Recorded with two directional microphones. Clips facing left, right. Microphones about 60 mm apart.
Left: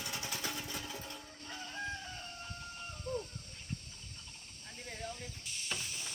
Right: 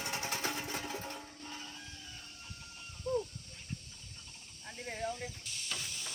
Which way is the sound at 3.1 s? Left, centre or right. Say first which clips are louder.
Right 5 dB; left.